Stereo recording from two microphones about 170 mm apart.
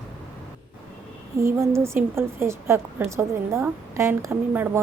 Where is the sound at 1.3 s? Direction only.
15° right (ahead or behind).